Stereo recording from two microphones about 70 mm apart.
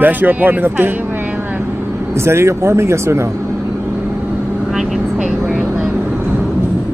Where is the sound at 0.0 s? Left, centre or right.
Right.